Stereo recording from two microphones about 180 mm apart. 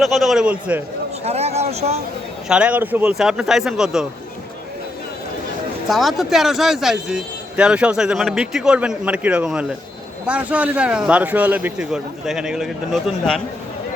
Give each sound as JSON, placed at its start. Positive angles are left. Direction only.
{"t": 0.0, "sound": "a man's voice", "side_deg": 0}
{"t": 1.2, "sound": "speech", "side_deg": -35}
{"t": 2.5, "sound": "a man's voice", "side_deg": -5}
{"t": 5.9, "sound": "a man's voice", "side_deg": 0}